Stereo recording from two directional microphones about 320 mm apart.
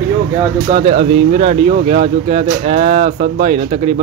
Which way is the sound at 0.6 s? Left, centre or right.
Centre.